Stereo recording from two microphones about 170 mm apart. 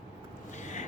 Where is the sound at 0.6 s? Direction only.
45° left (ahead or behind).